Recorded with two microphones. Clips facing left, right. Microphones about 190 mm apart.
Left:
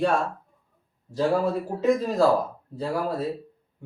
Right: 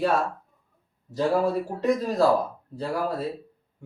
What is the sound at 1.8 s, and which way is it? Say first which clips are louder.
Speech: left 3 dB; centre (ahead or behind).